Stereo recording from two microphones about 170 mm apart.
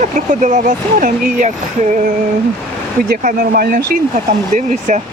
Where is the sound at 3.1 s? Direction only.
55° right (ahead or behind).